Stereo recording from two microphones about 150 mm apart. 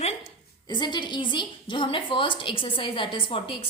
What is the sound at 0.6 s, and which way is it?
A woman's voice, 30° left (ahead or behind).